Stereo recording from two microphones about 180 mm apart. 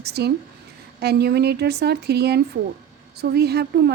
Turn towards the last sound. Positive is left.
turn(degrees=-65)  # may be behind; listen again after turning